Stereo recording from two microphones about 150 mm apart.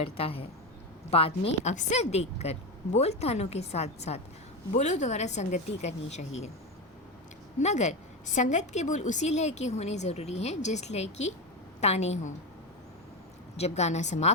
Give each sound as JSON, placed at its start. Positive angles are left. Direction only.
{"t": 0.0, "sound": "a woman's voice", "side_deg": 40}
{"t": 7.6, "sound": "a woman's voice", "side_deg": 50}
{"t": 13.6, "sound": "a woman's voice", "side_deg": 45}